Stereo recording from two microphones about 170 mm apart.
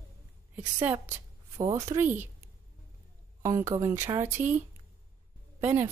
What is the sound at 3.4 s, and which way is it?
Speech, 15° right (ahead or behind).